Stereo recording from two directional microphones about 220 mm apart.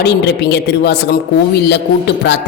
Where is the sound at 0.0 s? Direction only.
50° left (ahead or behind).